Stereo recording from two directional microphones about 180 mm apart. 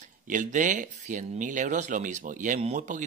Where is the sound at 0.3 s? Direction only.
45° right (ahead or behind).